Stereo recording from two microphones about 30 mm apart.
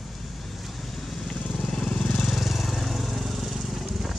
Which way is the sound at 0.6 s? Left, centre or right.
Centre.